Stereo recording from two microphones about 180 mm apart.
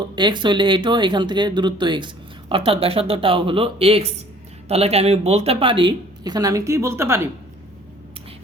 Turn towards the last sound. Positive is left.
turn(degrees=-15)  # may be behind; listen again after turning